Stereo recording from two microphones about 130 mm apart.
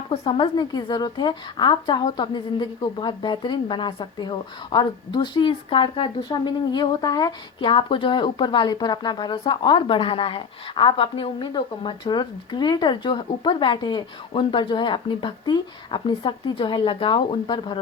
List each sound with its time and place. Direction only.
0.1 s a woman's voice: 40° left (ahead or behind)